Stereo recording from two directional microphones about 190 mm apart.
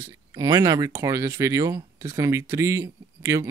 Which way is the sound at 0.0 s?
15° right (ahead or behind).